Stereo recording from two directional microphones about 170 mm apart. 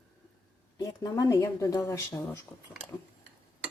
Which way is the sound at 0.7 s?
20° left (ahead or behind).